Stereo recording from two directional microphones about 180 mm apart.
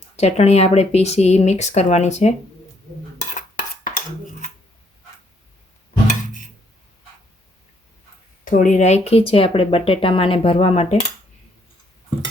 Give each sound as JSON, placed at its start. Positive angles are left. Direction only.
{"t": 0.2, "sound": "speech", "side_deg": 40}
{"t": 3.8, "sound": "dishes", "side_deg": 45}
{"t": 8.4, "sound": "speech", "side_deg": 45}